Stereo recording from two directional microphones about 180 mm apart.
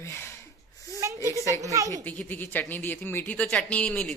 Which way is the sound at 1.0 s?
15° right (ahead or behind).